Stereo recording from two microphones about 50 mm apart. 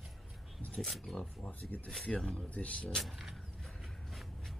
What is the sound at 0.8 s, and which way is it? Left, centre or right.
Speech, centre.